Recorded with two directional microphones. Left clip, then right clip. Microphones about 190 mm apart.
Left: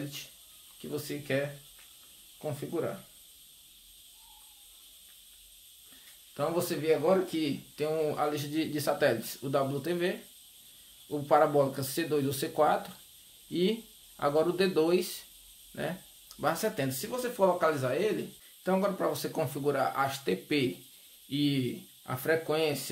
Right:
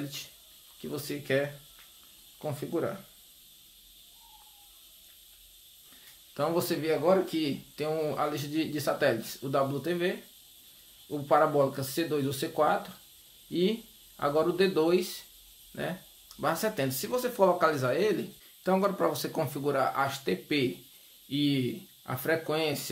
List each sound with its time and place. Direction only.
0.8 s speech: 15° right (ahead or behind)
2.4 s speech: 15° right (ahead or behind)
6.3 s speech: 15° right (ahead or behind)